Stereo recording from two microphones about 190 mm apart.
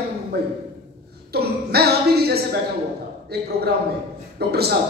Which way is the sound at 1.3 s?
55° right (ahead or behind).